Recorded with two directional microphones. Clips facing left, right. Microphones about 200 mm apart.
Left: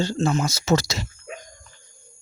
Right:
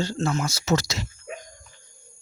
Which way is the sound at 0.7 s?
30° left (ahead or behind).